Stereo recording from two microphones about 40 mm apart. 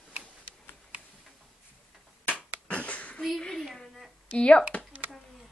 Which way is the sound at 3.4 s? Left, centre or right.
Centre.